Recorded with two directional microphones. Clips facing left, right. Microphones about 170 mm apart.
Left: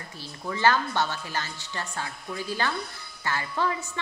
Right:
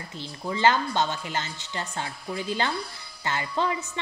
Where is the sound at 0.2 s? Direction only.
20° right (ahead or behind).